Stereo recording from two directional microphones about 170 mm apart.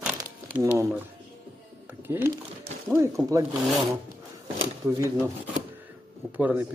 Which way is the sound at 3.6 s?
Centre (ahead or behind).